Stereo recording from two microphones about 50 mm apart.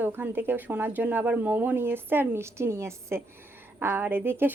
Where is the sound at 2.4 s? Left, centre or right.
Right.